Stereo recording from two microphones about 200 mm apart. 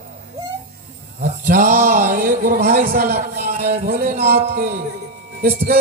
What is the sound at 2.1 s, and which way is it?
A man's voice, 45° right (ahead or behind).